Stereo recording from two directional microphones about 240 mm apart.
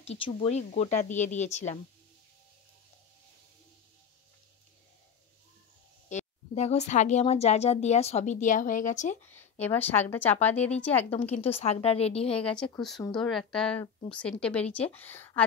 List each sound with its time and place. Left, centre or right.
0.0 s speech: left
6.0 s speech: left
9.2 s a woman's voice: centre
11.3 s speech: left
12.5 s a woman's voice: centre